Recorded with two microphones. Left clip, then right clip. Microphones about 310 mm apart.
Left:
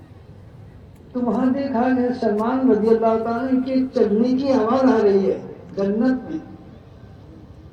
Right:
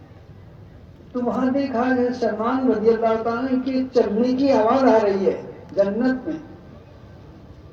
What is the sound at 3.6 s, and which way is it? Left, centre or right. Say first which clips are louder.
A woman's voice: right 1 dB; right.